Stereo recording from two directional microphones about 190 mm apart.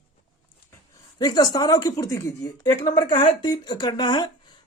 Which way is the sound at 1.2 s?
20° left (ahead or behind).